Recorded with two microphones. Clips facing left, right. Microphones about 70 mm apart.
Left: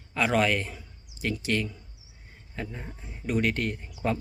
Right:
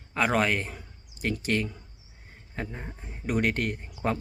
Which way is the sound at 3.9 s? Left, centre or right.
Right.